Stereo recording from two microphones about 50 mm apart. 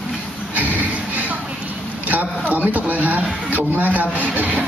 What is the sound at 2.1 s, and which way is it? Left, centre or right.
A man's voice, right.